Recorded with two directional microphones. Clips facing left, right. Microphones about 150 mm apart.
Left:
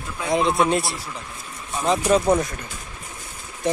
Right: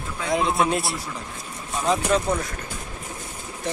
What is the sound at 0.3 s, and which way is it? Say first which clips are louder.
Speech: left 2 dB; centre (ahead or behind).